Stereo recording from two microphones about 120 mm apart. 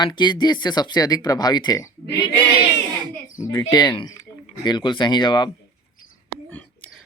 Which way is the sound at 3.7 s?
40° left (ahead or behind).